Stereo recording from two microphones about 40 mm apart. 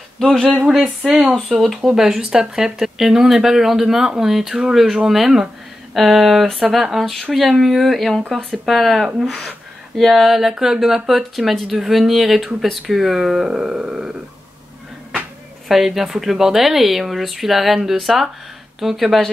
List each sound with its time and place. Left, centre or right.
0.2 s speech: centre
0.6 s a sound: right
1.0 s speech: centre
1.3 s speech: centre
1.8 s speech: centre
15.7 s speech: centre